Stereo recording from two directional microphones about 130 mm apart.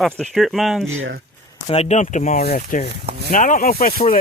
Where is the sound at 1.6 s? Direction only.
55° left (ahead or behind).